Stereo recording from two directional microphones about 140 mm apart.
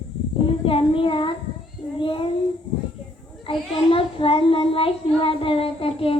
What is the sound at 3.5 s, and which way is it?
A child's voice, 40° left (ahead or behind).